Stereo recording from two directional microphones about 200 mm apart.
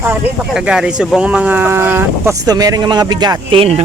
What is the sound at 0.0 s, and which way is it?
Speech, 10° right (ahead or behind).